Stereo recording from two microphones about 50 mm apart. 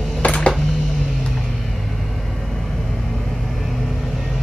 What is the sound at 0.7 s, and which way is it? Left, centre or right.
Music, centre.